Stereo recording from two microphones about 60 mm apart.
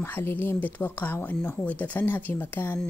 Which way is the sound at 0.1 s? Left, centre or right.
Left.